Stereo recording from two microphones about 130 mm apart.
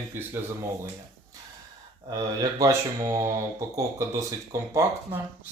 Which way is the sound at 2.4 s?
25° right (ahead or behind).